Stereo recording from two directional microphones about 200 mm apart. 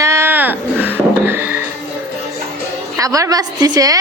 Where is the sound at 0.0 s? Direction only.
15° right (ahead or behind).